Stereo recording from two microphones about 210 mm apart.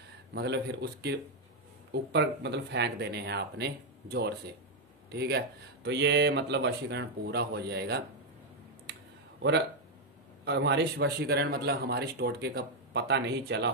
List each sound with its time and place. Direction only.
0.3 s speech: 50° right (ahead or behind)
10.4 s speech: 55° right (ahead or behind)